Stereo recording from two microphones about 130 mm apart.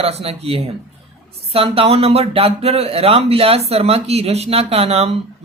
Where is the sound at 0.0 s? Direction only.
50° right (ahead or behind).